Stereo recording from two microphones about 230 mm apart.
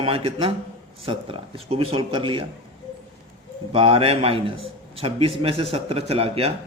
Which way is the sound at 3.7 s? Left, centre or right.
Right.